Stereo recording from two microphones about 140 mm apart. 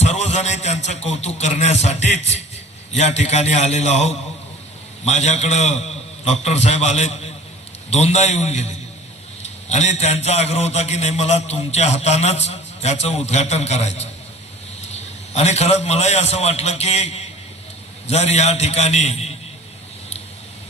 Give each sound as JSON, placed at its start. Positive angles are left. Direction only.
{"t": 0.0, "sound": "a man's voice", "side_deg": 50}
{"t": 18.1, "sound": "a man's voice", "side_deg": 50}